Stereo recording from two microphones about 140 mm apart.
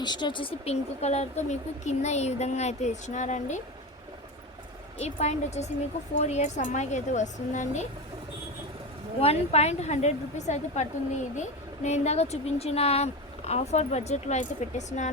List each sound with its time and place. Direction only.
0.0 s speech: 30° left (ahead or behind); by 3.6 s 60° left (ahead or behind)
4.9 s a woman's voice: 50° left (ahead or behind)
9.2 s speech: 50° left (ahead or behind)